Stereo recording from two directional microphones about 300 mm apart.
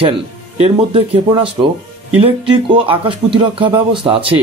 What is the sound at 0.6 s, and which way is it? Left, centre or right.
Speech, centre.